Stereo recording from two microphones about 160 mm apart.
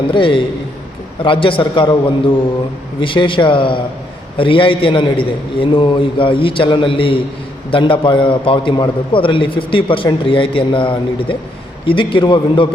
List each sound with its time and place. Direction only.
0.1 s a man's voice: 30° left (ahead or behind)